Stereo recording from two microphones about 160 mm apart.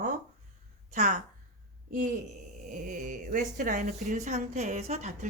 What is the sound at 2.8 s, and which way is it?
Speech, 55° right (ahead or behind).